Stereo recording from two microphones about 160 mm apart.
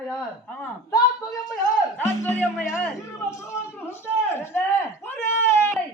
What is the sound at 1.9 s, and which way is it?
Speech, 10° left (ahead or behind).